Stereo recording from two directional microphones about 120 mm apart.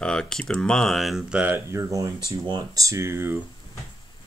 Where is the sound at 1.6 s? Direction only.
25° right (ahead or behind).